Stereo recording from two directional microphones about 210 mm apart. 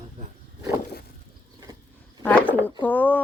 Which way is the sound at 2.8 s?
10° left (ahead or behind).